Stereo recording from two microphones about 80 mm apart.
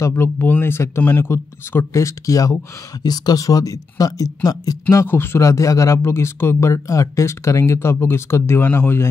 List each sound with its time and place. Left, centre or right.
0.0 s speech: left
5.0 s speech: left